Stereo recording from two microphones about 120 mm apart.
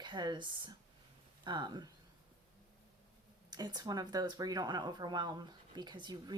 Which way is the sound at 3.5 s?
35° right (ahead or behind).